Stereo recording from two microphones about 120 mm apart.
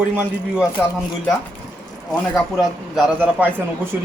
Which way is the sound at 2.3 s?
Centre (ahead or behind).